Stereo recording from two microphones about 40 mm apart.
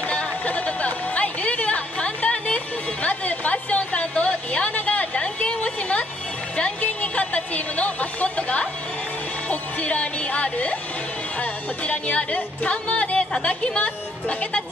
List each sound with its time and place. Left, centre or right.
0.1 s a sound: left
6.8 s speech: left
9.5 s music: left
13.3 s a woman's voice: left